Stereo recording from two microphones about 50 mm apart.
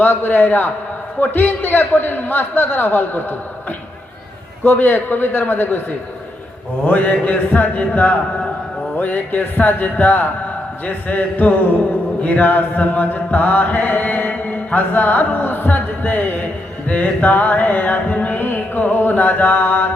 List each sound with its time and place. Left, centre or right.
0.0 s music: left
1.2 s a man's voice: left
4.6 s music: left
6.8 s music: left